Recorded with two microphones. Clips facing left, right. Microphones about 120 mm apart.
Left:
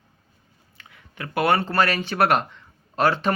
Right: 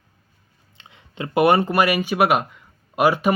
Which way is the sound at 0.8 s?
25° right (ahead or behind).